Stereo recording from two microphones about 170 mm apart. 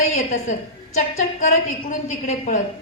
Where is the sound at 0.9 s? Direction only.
40° left (ahead or behind).